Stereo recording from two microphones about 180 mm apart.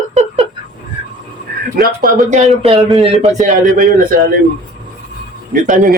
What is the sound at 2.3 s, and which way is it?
Speech, 40° right (ahead or behind).